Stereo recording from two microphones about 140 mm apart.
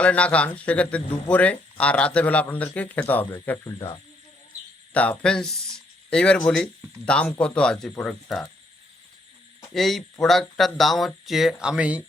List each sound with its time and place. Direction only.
0.0 s a man's voice: 10° left (ahead or behind); by 3.9 s 25° left (ahead or behind)
4.9 s a man's voice: 10° left (ahead or behind)
9.7 s speech: centre (ahead or behind)